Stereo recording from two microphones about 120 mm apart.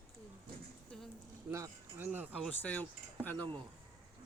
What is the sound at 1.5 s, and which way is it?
Speech, 20° right (ahead or behind).